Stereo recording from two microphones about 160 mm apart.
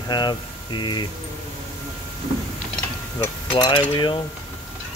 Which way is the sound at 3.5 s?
25° left (ahead or behind).